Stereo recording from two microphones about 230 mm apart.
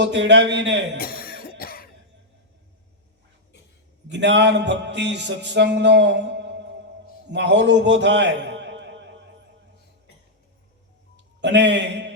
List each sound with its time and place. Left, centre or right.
0.0 s a man's voice: right
0.9 s cough: left
4.1 s a man's voice: right
11.3 s a man's voice: right